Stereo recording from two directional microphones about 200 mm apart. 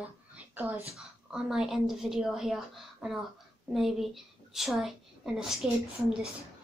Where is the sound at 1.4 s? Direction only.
Centre (ahead or behind).